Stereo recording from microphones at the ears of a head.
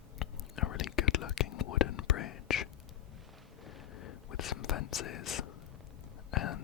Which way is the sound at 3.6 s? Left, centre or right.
Left.